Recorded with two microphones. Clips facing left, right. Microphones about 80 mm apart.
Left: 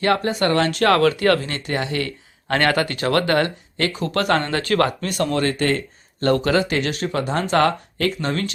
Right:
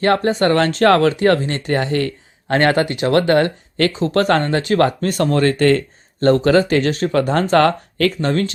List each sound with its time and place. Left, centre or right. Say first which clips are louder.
0.0 s speech: right 4 dB; right
4.4 s speech: right 4 dB; right
6.1 s speech: right 5 dB; right